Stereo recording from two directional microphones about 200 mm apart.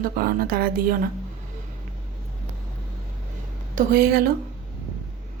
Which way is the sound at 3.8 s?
50° right (ahead or behind).